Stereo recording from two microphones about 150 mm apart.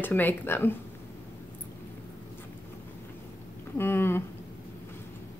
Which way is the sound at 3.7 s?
15° left (ahead or behind).